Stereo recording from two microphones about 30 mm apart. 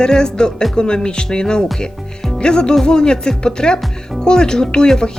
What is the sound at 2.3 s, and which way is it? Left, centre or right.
Music, left.